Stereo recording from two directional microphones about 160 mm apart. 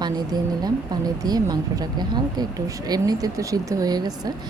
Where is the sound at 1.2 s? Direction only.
25° right (ahead or behind).